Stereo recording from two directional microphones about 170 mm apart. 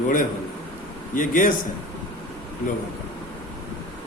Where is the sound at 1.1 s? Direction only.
50° left (ahead or behind).